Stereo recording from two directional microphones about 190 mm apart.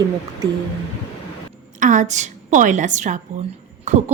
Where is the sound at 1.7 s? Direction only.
40° right (ahead or behind).